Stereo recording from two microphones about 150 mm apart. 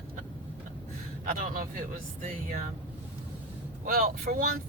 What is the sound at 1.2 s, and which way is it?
Speech, 65° right (ahead or behind).